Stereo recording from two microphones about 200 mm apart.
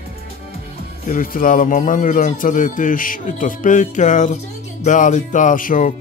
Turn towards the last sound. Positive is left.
turn(degrees=40)  # may be behind; listen again after turning